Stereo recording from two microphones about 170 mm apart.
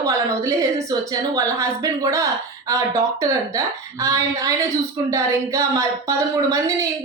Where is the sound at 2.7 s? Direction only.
20° right (ahead or behind).